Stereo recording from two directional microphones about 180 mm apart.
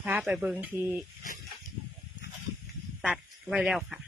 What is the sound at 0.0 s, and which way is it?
Speech, 10° right (ahead or behind).